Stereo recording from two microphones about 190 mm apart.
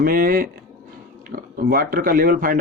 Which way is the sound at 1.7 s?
50° right (ahead or behind).